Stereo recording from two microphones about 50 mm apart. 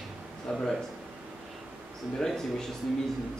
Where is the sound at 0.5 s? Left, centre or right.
Centre.